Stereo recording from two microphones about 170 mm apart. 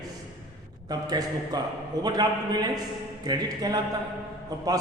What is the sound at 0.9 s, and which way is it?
A man's voice, 20° right (ahead or behind).